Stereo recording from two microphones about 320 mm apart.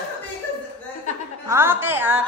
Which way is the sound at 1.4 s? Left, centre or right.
Centre.